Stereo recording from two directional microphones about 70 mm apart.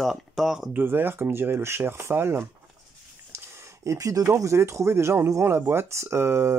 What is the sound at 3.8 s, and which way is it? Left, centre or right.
Speech, right.